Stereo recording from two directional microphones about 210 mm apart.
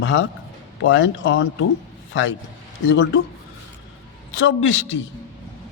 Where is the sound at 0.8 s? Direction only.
65° left (ahead or behind).